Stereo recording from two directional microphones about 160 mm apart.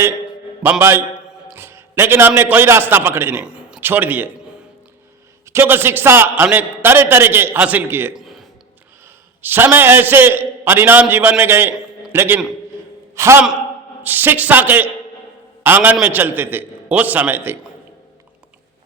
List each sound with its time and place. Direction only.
0.6 s a man's voice: 15° right (ahead or behind)
5.5 s a man's voice: 15° right (ahead or behind)
8.1 s a sound: centre (ahead or behind)
9.4 s a man's voice: 15° right (ahead or behind)